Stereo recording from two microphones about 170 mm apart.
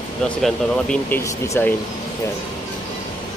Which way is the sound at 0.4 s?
5° left (ahead or behind).